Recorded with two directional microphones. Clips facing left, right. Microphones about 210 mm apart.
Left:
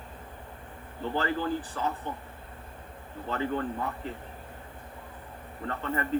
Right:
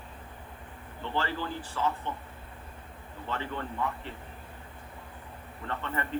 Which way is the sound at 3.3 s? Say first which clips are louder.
Left 5 dB; 40° left (ahead or behind).